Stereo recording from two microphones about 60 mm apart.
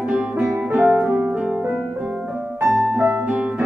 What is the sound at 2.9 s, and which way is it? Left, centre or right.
Music, right.